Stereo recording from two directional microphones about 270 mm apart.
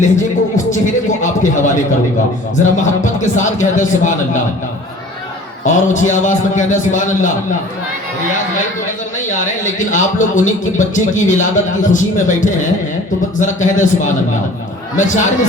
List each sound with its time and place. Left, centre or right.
0.0 s speech: left
5.9 s speech: left
9.6 s speech: left